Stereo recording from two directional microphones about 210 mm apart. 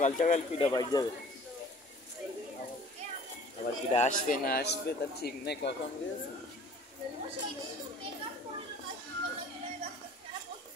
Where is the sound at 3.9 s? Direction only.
35° left (ahead or behind); by 5.7 s 50° left (ahead or behind).